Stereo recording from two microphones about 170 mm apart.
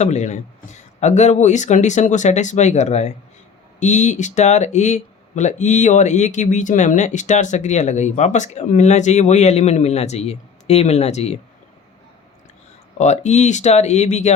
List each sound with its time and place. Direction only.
0.0 s speech: 40° left (ahead or behind)
13.0 s speech: 40° left (ahead or behind)